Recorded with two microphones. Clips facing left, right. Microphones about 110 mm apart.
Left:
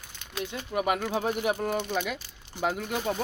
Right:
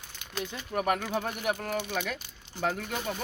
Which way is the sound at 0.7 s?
10° left (ahead or behind).